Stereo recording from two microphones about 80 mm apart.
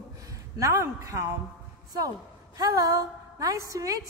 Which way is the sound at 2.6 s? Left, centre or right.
Right.